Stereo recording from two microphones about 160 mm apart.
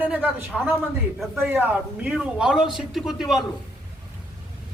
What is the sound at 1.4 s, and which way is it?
A man's voice, 10° right (ahead or behind).